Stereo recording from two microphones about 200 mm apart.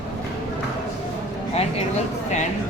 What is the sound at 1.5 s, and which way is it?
Speech, 30° left (ahead or behind).